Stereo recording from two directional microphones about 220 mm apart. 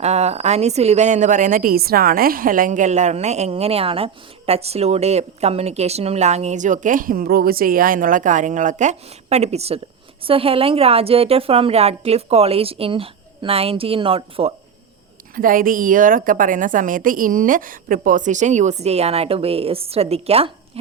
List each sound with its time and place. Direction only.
0.0 s a woman's voice: 30° right (ahead or behind)
15.4 s a woman's voice: 40° right (ahead or behind)